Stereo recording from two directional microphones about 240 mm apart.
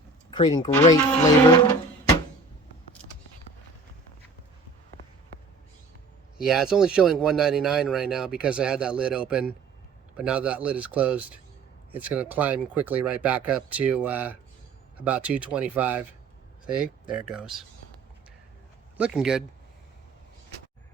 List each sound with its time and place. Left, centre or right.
0.3 s speech: centre
6.3 s speech: centre
17.1 s speech: centre
18.9 s speech: centre